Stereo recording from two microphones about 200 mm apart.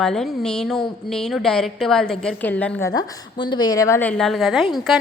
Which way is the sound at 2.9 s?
20° left (ahead or behind).